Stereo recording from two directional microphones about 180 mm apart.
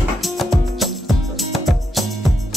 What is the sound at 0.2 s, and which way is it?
Music, centre (ahead or behind).